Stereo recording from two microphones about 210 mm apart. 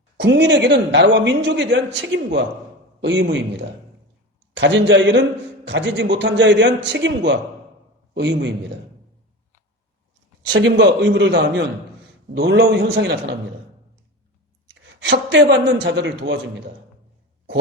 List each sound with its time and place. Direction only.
0.2 s speech: 55° right (ahead or behind)
10.4 s speech: 55° right (ahead or behind)
15.0 s speech: 55° right (ahead or behind)